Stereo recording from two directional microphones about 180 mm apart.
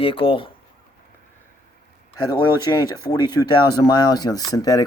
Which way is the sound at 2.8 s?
20° left (ahead or behind).